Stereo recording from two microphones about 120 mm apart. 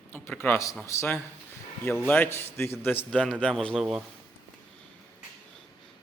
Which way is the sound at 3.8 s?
Centre (ahead or behind).